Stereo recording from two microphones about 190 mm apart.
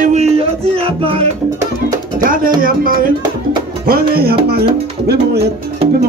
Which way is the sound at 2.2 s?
45° right (ahead or behind).